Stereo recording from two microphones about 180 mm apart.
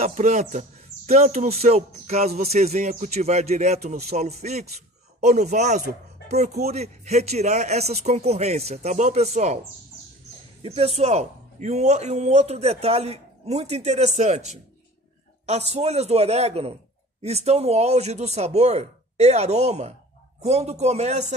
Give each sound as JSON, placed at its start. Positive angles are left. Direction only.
{"t": 0.0, "sound": "speech", "side_deg": -40}
{"t": 15.7, "sound": "speech", "side_deg": -35}